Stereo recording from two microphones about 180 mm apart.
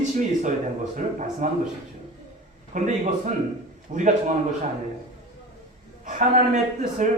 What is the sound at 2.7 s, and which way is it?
A man's voice, 45° right (ahead or behind).